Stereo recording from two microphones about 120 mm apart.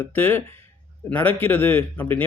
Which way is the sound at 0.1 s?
15° left (ahead or behind).